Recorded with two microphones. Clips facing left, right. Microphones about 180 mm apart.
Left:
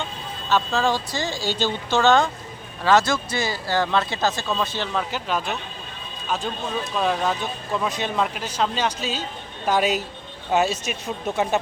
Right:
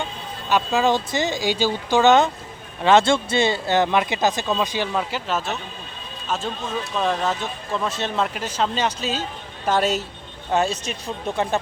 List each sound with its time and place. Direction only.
0.4 s speech: 15° right (ahead or behind); by 7.9 s 5° left (ahead or behind)
7.9 s speech: 15° left (ahead or behind)
8.1 s speech: centre (ahead or behind)